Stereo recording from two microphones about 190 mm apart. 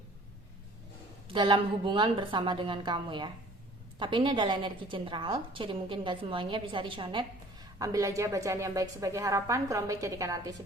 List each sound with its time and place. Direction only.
1.3 s a woman's voice: 25° right (ahead or behind)